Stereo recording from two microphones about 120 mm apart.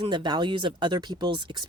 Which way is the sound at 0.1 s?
40° right (ahead or behind).